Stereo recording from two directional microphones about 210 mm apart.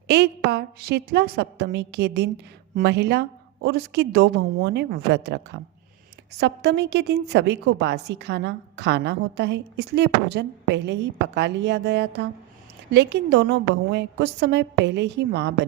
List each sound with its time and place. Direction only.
0.1 s a woman's voice: 50° right (ahead or behind)